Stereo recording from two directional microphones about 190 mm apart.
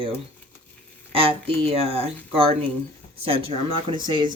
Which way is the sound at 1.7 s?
30° right (ahead or behind).